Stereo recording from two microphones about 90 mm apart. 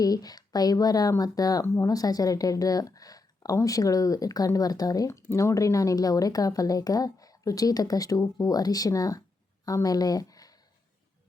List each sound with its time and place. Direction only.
0.0 s speech: 45° left (ahead or behind)